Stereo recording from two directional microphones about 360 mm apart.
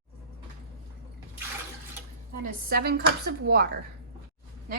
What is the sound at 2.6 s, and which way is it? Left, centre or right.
Dishes, right.